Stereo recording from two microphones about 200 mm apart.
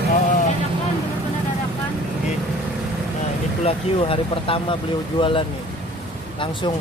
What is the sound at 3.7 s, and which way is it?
Speech, 25° left (ahead or behind).